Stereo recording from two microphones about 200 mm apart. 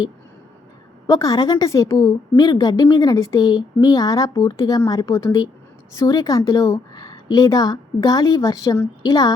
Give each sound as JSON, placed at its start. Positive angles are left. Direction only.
{"t": 1.0, "sound": "a woman's voice", "side_deg": 15}